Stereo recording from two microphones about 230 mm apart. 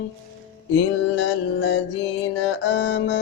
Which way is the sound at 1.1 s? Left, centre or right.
Left.